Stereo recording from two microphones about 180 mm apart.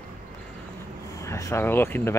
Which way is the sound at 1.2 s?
15° left (ahead or behind).